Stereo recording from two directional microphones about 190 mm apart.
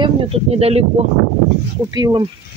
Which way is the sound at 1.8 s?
20° right (ahead or behind).